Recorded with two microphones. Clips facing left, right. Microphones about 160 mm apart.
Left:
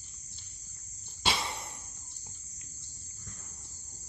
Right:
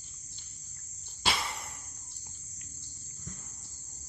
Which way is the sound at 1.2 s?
25° left (ahead or behind).